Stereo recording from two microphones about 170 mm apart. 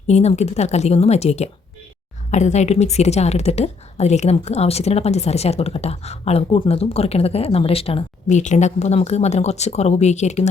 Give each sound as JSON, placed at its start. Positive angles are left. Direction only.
{"t": 0.1, "sound": "a woman's voice", "side_deg": 40}